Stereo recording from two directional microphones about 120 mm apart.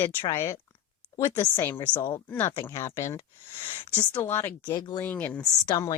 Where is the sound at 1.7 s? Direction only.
40° left (ahead or behind).